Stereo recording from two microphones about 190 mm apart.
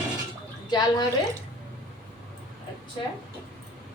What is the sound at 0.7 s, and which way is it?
Speech, 20° left (ahead or behind).